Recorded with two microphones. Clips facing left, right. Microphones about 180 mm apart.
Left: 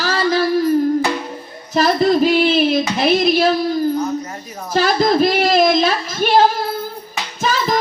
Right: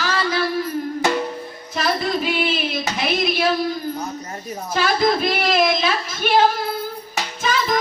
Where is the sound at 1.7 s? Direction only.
40° left (ahead or behind).